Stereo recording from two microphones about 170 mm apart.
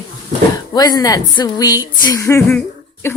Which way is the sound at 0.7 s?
25° left (ahead or behind).